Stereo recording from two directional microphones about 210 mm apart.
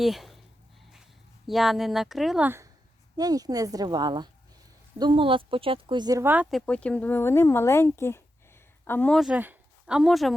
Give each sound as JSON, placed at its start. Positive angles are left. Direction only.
{"t": 0.0, "sound": "speech", "side_deg": 0}
{"t": 1.5, "sound": "speech", "side_deg": 0}